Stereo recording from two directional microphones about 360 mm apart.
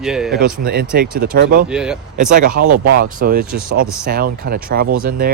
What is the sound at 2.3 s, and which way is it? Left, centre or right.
Speech, right.